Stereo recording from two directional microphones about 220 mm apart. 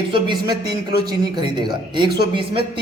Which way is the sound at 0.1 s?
20° right (ahead or behind).